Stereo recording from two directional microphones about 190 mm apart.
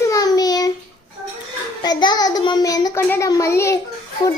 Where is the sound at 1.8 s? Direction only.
20° left (ahead or behind).